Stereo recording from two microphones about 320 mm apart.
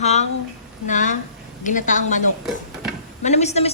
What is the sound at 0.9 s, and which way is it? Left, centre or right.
A woman's voice, left.